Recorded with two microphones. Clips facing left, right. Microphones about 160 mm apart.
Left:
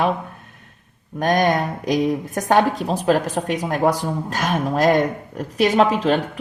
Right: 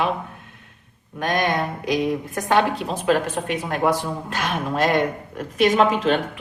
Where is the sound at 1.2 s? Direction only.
40° left (ahead or behind).